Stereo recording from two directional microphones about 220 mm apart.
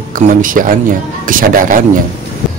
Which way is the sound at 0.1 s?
40° right (ahead or behind).